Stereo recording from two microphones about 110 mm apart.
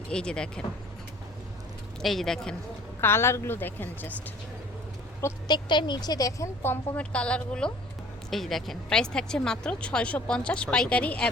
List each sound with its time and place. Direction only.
0.1 s speech: 10° left (ahead or behind)
2.0 s speech: centre (ahead or behind)
3.0 s a woman's voice: 20° left (ahead or behind)
5.5 s speech: 45° left (ahead or behind)
6.6 s a woman's voice: 20° left (ahead or behind)
7.0 s speech: 10° left (ahead or behind)